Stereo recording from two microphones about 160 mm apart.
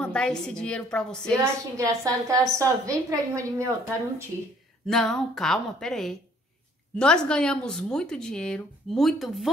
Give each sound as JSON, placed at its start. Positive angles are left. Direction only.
{"t": 0.0, "sound": "a woman's voice", "side_deg": 5}
{"t": 1.4, "sound": "a woman's voice", "side_deg": -20}
{"t": 4.8, "sound": "a woman's voice", "side_deg": 5}